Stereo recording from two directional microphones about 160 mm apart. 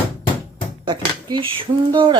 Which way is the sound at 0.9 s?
30° right (ahead or behind).